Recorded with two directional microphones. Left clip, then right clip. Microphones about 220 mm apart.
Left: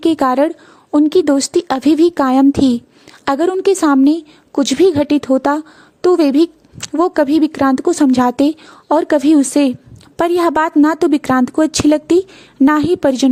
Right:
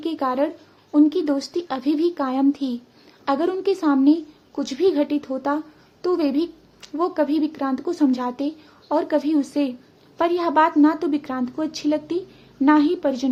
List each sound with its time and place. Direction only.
0.0 s speech: 50° left (ahead or behind)